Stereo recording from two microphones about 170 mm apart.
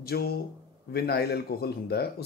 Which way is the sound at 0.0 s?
65° left (ahead or behind).